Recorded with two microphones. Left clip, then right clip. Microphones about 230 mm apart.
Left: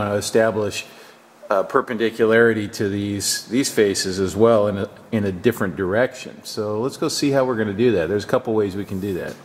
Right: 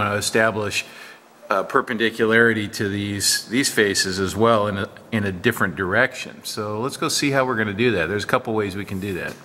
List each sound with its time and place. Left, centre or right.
0.0 s speech: centre
6.5 s speech: centre
6.8 s speech: centre